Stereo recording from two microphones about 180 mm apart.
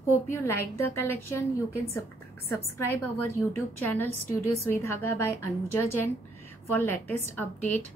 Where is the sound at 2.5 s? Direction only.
15° left (ahead or behind).